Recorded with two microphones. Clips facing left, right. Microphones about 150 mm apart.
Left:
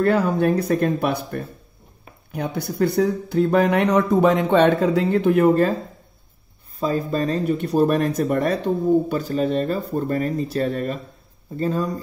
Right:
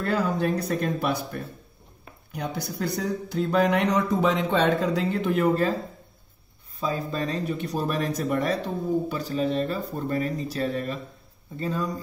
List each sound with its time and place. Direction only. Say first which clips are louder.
0.0 s speech: left 7 dB; 60° left (ahead or behind)
6.8 s speech: left 6 dB; 45° left (ahead or behind)
7.4 s speech: left 9 dB; 55° left (ahead or behind)